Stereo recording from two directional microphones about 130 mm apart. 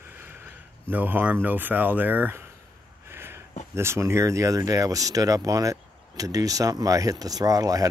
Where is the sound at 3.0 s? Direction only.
20° right (ahead or behind).